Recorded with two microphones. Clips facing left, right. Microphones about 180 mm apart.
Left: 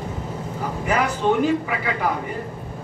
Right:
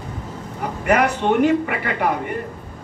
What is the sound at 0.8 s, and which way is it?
A man's voice, 65° right (ahead or behind).